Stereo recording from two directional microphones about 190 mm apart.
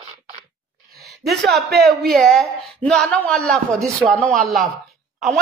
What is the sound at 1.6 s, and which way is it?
Speech, 60° right (ahead or behind).